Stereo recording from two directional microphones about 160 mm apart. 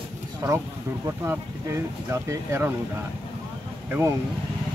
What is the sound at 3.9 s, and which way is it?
Speech, 15° right (ahead or behind).